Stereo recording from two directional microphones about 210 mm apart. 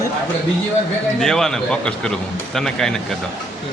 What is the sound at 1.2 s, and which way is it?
Speech, 5° left (ahead or behind).